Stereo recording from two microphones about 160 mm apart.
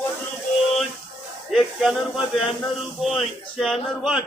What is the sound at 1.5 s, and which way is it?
Speech, centre (ahead or behind).